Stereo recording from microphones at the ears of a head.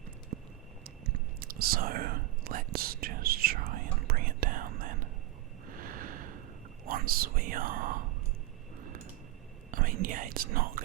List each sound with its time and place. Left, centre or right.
0.9 s whispering: right
5.6 s snort: right
6.8 s whispering: right
8.8 s a sound: right
9.7 s whispering: right